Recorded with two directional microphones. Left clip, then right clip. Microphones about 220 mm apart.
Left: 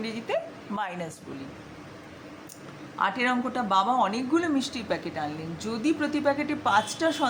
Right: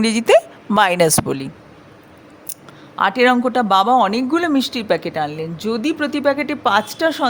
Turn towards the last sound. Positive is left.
turn(degrees=-40)  # may be behind; listen again after turning